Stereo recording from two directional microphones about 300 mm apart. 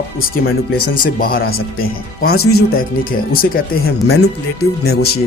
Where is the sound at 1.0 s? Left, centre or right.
Left.